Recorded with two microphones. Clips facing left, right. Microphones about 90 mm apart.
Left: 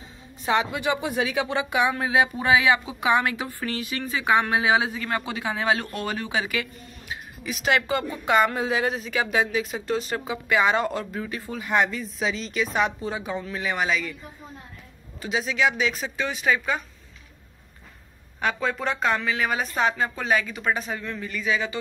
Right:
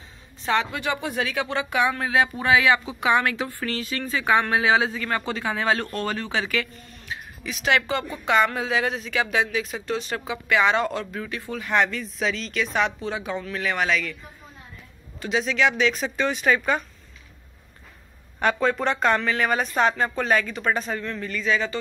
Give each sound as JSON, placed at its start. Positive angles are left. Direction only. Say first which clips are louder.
{"t": 0.5, "sound": "speech", "louder": "left 1 dB", "side_deg": 15}
{"t": 15.2, "sound": "speech", "louder": "right 2 dB", "side_deg": 5}
{"t": 18.4, "sound": "speech", "louder": "right 4 dB", "side_deg": 5}